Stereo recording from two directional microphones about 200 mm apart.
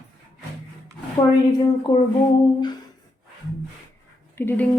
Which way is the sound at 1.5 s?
20° left (ahead or behind).